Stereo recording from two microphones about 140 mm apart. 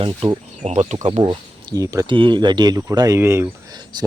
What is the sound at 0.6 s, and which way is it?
Speech, 50° right (ahead or behind).